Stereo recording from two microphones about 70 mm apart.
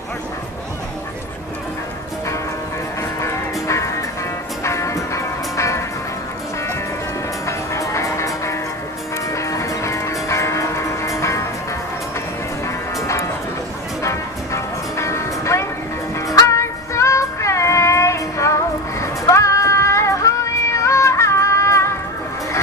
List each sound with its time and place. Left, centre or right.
3.0 s music: left
7.4 s music: left
9.3 s music: left
13.0 s music: left